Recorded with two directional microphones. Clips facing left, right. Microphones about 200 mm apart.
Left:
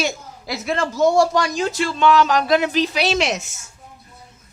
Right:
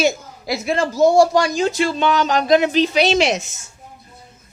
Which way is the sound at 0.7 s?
35° right (ahead or behind).